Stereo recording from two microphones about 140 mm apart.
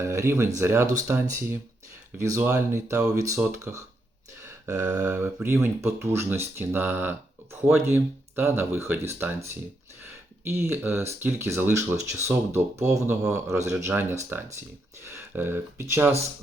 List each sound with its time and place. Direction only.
0.0 s speech: 20° right (ahead or behind)